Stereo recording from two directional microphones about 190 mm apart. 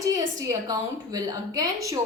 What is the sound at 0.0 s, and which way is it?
A woman's voice, 20° right (ahead or behind).